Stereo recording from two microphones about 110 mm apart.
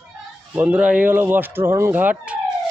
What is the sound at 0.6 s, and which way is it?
Speech, 10° right (ahead or behind).